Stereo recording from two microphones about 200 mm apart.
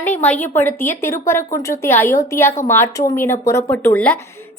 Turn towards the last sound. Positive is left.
turn(degrees=10)  # may be behind; listen again after turning